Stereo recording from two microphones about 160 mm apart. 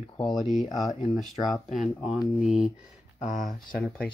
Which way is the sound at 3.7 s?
5° left (ahead or behind).